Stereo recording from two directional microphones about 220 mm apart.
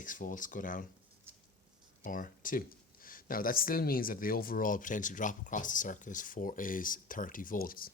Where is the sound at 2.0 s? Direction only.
40° left (ahead or behind).